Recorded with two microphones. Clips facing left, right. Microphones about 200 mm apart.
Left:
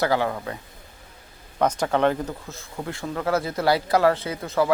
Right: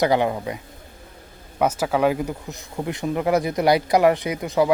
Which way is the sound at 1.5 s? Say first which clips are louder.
Right 1 dB; 5° right (ahead or behind).